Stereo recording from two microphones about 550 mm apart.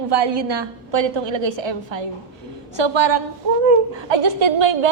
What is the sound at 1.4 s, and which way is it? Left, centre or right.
A woman's voice, right.